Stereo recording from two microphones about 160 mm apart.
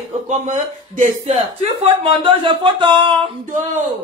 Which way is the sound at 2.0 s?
30° right (ahead or behind).